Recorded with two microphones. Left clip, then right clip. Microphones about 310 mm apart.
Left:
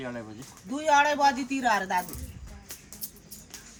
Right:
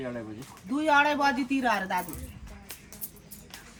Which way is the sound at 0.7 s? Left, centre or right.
Left.